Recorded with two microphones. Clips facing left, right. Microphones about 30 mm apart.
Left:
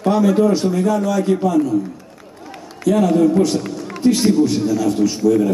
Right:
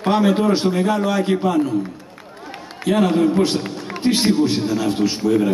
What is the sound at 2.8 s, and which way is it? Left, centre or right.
A man's voice, right.